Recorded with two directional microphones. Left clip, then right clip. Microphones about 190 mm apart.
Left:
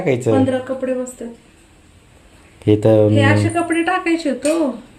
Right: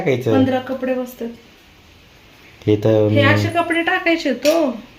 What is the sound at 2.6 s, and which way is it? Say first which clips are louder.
Speech: left 2 dB; 20° left (ahead or behind).